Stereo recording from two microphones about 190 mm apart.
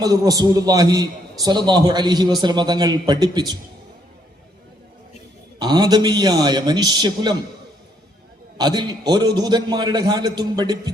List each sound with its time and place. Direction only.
0.0 s a man's voice: 20° right (ahead or behind)
5.5 s a man's voice: 20° right (ahead or behind)
8.5 s a man's voice: 25° right (ahead or behind)